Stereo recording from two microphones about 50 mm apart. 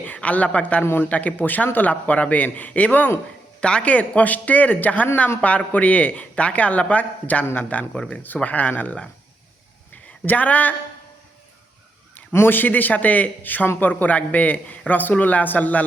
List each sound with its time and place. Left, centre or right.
0.0 s a woman's voice: left
3.6 s a man's voice: left
9.9 s a sound: left
12.3 s a man's voice: left